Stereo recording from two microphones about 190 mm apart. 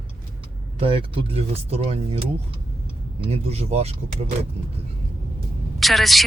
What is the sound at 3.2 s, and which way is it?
Speech, 30° right (ahead or behind).